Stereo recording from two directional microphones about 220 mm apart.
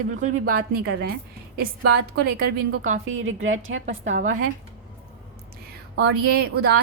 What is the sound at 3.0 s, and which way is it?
Speech, 65° right (ahead or behind).